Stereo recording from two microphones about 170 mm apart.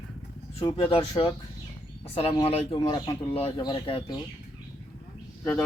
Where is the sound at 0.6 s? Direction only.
30° left (ahead or behind).